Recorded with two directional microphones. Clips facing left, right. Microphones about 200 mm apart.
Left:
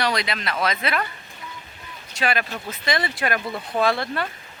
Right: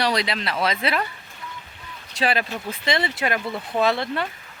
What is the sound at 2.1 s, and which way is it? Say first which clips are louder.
Speech: right 1 dB; 35° right (ahead or behind).